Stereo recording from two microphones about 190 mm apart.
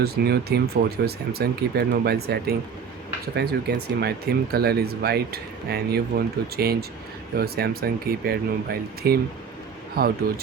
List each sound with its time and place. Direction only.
0.0 s speech: 55° right (ahead or behind)